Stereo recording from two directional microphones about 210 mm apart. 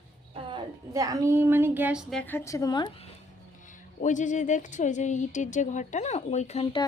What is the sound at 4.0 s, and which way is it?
Speech, 35° left (ahead or behind).